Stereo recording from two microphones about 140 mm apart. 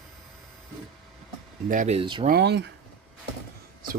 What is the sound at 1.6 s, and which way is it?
Speech, 65° right (ahead or behind).